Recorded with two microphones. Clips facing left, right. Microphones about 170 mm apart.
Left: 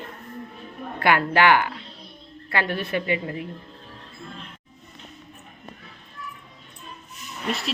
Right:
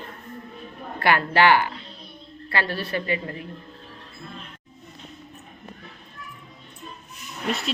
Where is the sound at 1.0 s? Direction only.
15° left (ahead or behind).